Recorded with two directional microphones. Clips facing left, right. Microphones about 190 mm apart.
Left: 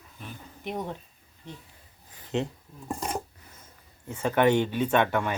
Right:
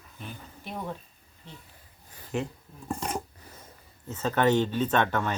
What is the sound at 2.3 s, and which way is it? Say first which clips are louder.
Speech: left 2 dB; 20° left (ahead or behind).